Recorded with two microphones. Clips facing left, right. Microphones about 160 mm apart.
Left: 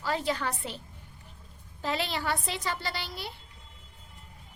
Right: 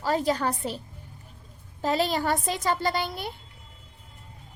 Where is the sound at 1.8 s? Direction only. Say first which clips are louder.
Right 6 dB; 40° right (ahead or behind).